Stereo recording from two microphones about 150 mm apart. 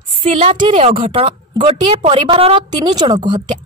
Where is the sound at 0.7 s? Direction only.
50° right (ahead or behind).